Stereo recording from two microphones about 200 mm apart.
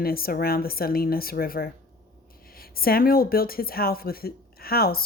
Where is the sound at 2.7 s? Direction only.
50° left (ahead or behind).